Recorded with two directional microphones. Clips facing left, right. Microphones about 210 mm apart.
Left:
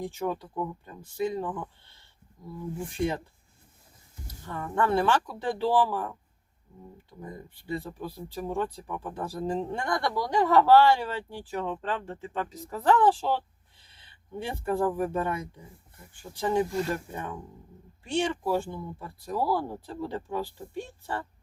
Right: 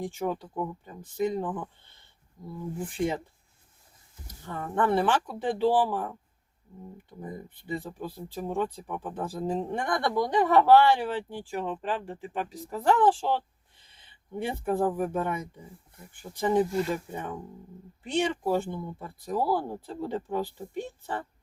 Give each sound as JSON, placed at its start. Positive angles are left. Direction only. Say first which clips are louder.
{"t": 0.3, "sound": "speech", "louder": "even", "side_deg": -15}
{"t": 2.9, "sound": "speech", "louder": "even", "side_deg": -15}
{"t": 4.4, "sound": "speech", "louder": "right 1 dB", "side_deg": -20}
{"t": 14.4, "sound": "speech", "louder": "right 1 dB", "side_deg": -15}
{"t": 16.5, "sound": "speech", "louder": "right 2 dB", "side_deg": -15}